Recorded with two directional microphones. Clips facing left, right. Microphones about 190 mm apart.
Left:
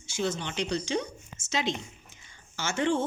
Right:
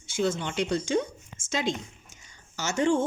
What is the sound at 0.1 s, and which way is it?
Speech, 55° right (ahead or behind).